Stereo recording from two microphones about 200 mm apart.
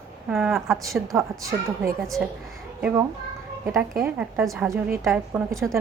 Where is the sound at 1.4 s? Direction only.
15° right (ahead or behind).